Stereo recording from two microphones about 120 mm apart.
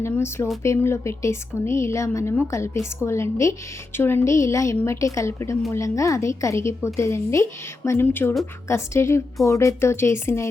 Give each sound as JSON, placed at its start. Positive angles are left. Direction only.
{"t": 0.0, "sound": "speech", "side_deg": 20}